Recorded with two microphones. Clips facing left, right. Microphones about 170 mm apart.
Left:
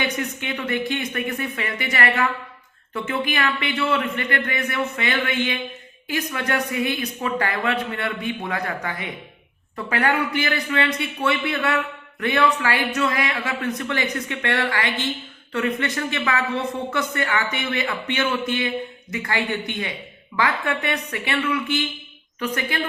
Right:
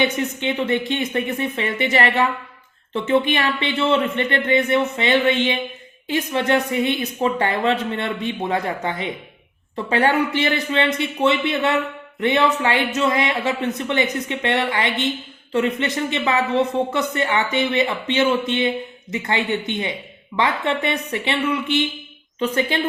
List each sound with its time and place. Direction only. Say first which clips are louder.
0.0 s speech: right 5 dB; 25° right (ahead or behind)